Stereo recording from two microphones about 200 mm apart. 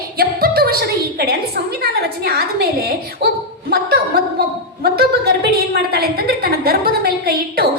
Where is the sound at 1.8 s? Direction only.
50° right (ahead or behind).